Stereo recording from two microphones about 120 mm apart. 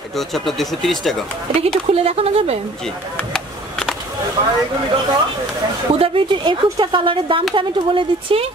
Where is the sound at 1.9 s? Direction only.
55° right (ahead or behind).